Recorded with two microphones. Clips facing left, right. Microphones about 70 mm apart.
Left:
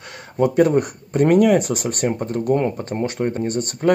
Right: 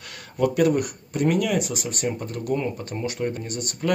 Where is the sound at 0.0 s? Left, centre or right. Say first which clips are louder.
Left 4 dB; left.